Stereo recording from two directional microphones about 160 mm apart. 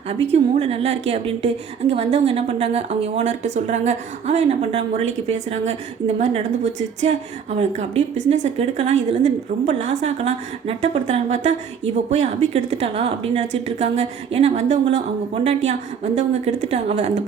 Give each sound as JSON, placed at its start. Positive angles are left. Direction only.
{"t": 0.1, "sound": "a woman's voice", "side_deg": -40}
{"t": 16.1, "sound": "a woman's voice", "side_deg": -45}